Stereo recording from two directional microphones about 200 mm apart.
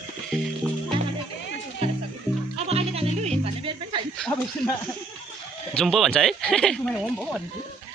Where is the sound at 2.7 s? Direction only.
30° right (ahead or behind).